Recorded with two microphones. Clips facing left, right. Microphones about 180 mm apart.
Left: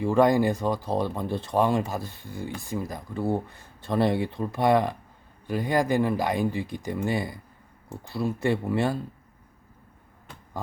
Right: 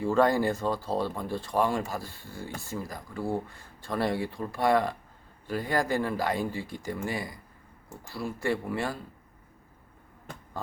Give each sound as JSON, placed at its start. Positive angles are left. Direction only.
{"t": 0.0, "sound": "speech", "side_deg": 15}